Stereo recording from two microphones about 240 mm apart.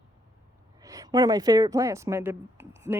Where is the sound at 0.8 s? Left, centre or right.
Centre.